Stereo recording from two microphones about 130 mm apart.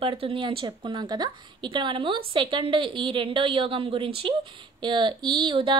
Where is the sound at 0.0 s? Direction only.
45° right (ahead or behind).